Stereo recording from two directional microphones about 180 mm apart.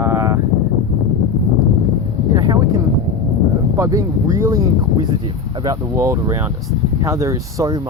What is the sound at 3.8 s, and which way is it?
Speech, 15° right (ahead or behind).